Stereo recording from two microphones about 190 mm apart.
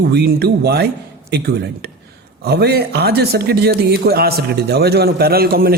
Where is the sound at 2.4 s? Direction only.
60° right (ahead or behind).